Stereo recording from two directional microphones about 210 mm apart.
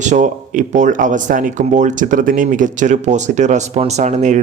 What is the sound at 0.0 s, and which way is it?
Speech, 35° right (ahead or behind).